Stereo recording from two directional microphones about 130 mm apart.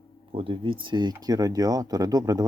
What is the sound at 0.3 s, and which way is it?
Speech, 40° right (ahead or behind).